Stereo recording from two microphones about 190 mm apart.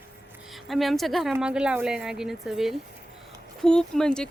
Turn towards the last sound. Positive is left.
turn(degrees=5)  # may be behind; listen again after turning